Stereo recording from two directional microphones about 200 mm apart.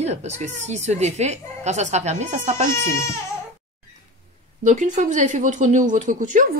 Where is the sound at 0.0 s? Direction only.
35° right (ahead or behind).